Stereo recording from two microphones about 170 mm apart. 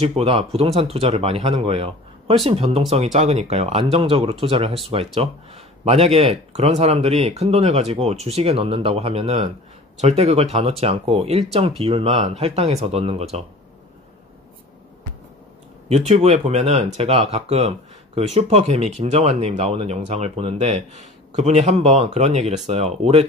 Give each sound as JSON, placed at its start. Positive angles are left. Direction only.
{"t": 0.0, "sound": "speech", "side_deg": -35}
{"t": 16.1, "sound": "speech", "side_deg": -40}